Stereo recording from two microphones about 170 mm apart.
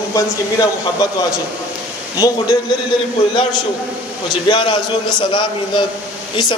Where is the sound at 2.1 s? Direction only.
20° left (ahead or behind).